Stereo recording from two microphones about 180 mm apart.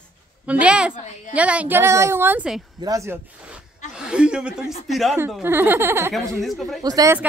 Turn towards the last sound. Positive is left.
turn(degrees=-20)  # may be behind; listen again after turning